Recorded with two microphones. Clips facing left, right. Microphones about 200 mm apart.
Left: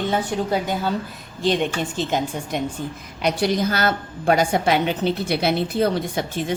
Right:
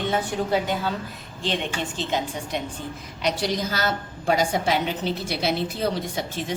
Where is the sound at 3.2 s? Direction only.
55° left (ahead or behind).